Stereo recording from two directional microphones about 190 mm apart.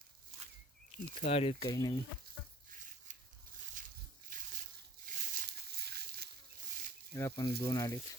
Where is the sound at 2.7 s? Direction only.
40° right (ahead or behind).